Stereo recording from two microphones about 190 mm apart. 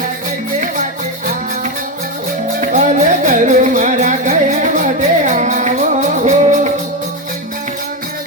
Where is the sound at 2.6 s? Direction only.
40° right (ahead or behind).